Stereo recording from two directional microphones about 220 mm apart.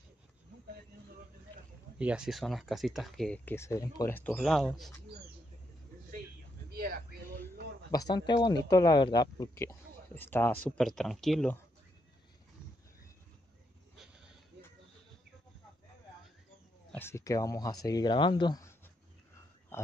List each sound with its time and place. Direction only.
2.0 s speech: 5° right (ahead or behind)
6.7 s a sound: 45° right (ahead or behind)
7.9 s speech: 20° left (ahead or behind); by 11.6 s 5° left (ahead or behind)
13.9 s sheep: centre (ahead or behind)
16.9 s speech: 10° left (ahead or behind)
19.7 s speech: 10° left (ahead or behind)